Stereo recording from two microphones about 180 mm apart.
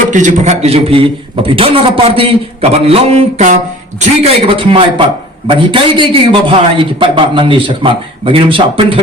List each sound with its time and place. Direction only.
0.1 s a man's voice: 45° right (ahead or behind)